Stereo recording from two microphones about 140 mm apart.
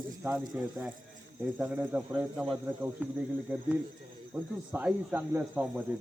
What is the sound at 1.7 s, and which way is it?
Speech, 10° right (ahead or behind).